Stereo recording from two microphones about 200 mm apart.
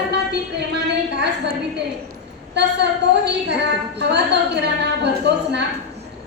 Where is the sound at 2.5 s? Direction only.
60° right (ahead or behind).